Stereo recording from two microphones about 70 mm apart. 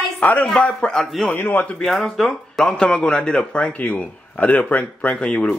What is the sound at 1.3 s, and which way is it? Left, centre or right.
Speech, left.